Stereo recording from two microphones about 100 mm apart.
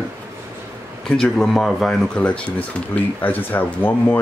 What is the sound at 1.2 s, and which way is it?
Speech, 5° left (ahead or behind).